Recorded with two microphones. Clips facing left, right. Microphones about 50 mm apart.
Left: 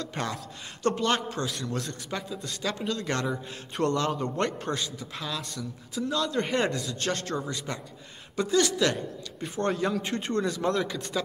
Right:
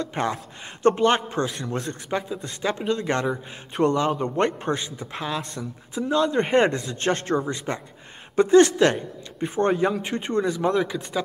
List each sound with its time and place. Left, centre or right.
0.0 s a man's voice: right